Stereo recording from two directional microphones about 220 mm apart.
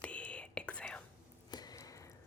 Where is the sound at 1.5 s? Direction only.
20° left (ahead or behind).